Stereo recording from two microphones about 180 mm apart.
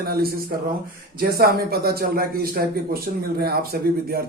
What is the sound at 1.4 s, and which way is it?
Speech, 60° right (ahead or behind).